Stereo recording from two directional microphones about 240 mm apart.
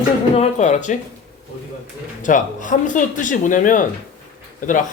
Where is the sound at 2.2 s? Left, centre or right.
Left.